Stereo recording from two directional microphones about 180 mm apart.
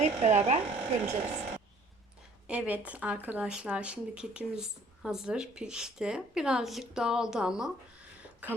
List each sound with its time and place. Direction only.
0.0 s speech: 40° right (ahead or behind)
2.5 s speech: 10° right (ahead or behind)